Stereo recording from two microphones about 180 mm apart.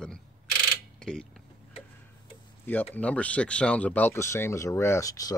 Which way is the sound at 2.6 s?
10° left (ahead or behind).